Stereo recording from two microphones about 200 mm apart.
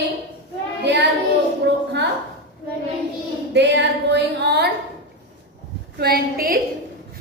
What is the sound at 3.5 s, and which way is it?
A woman's voice, 60° right (ahead or behind).